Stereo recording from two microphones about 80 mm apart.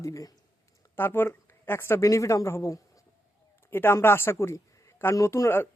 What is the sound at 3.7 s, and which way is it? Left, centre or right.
A man's voice, left.